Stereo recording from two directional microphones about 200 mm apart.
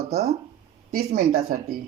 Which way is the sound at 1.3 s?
45° right (ahead or behind).